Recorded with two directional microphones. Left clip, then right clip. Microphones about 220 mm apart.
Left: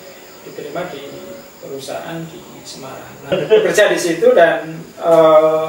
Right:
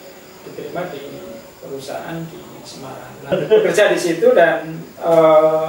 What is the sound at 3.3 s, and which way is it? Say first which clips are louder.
Speech: left 1 dB; 10° right (ahead or behind).